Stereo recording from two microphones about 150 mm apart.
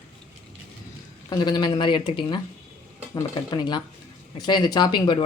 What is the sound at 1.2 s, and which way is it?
Speech, 30° left (ahead or behind).